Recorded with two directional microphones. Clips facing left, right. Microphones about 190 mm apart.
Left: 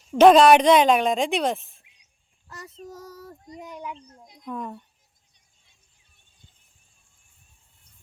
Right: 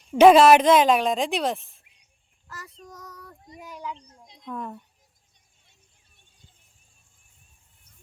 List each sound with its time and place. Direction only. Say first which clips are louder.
0.0 s speech: even; 5° right (ahead or behind)
2.5 s child singing: left 1 dB; 20° left (ahead or behind)
2.9 s child singing: left 4 dB; 30° left (ahead or behind)
3.6 s a child's voice: even; 25° left (ahead or behind)
4.4 s speech: left 1 dB; centre (ahead or behind)